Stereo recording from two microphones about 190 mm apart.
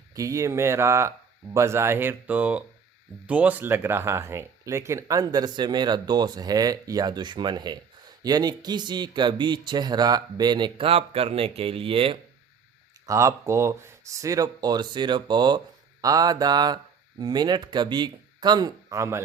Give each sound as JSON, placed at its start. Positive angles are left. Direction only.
{"t": 0.2, "sound": "speech", "side_deg": -15}
{"t": 13.1, "sound": "speech", "side_deg": -15}